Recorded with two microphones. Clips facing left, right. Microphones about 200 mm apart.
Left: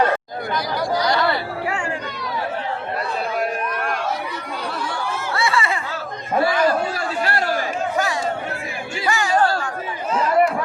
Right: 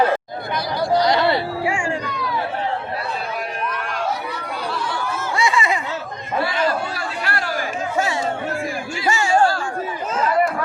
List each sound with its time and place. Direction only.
0.9 s chatter: 25° right (ahead or behind)
5.3 s a sound: 15° right (ahead or behind)
9.0 s music: 25° right (ahead or behind)